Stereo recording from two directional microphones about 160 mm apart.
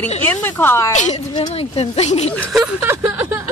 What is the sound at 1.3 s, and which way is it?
Speech, 35° left (ahead or behind).